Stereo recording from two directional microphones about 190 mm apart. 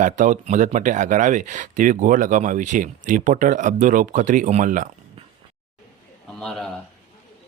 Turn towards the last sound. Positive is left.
turn(degrees=5)  # may be behind; listen again after turning